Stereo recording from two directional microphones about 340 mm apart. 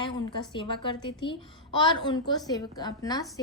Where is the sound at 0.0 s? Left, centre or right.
Centre.